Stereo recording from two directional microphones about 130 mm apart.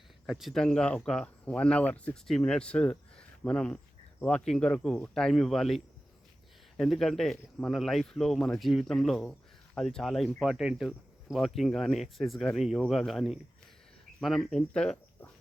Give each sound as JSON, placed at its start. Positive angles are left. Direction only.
{"t": 0.3, "sound": "speech", "side_deg": 0}